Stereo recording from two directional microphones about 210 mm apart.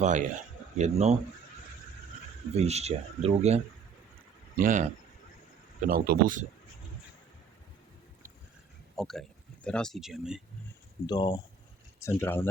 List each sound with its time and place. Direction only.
0.0 s speech: 35° right (ahead or behind)
2.6 s speech: 30° right (ahead or behind)
5.9 s speech: 40° right (ahead or behind)
9.0 s speech: centre (ahead or behind)
11.0 s speech: 20° left (ahead or behind)